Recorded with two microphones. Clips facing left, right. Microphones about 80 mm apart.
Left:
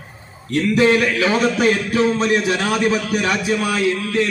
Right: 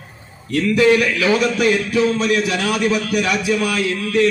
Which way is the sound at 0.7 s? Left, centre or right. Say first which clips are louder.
Right 1 dB; left.